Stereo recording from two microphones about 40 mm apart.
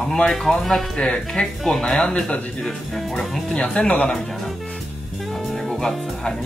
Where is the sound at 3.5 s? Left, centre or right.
Left.